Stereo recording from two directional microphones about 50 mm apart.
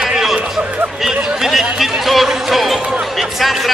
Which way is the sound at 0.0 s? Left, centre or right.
Centre.